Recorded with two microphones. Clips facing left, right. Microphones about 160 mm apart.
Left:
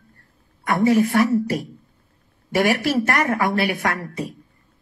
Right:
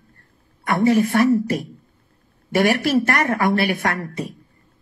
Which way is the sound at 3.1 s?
35° right (ahead or behind).